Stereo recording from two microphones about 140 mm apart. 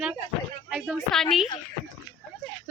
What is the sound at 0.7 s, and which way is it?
Speech, centre (ahead or behind).